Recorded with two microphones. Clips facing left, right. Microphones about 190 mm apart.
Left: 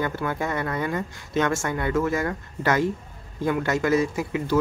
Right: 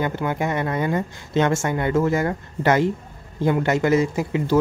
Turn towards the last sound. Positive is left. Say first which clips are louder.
# right 3 dB
turn(degrees=-25)  # may be behind; listen again after turning